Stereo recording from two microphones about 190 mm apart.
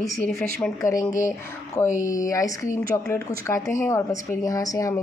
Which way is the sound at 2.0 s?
15° left (ahead or behind).